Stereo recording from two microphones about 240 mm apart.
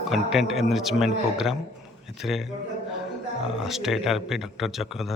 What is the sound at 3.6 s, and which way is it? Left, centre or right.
A man's voice, centre.